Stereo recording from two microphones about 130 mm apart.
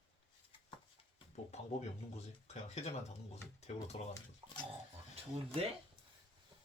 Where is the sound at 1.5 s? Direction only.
60° left (ahead or behind).